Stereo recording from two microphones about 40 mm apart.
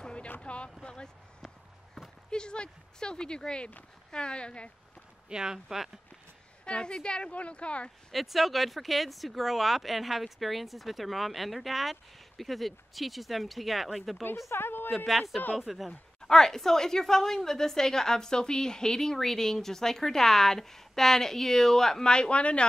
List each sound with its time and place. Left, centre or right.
0.0 s a sound: left
0.8 s speech: left
2.0 s a sound: centre
2.3 s speech: left
5.3 s speech: centre
6.6 s speech: left
8.1 s speech: centre
14.5 s a woman's voice: left
15.0 s speech: centre
16.2 s a woman's voice: centre; by 22.7 s left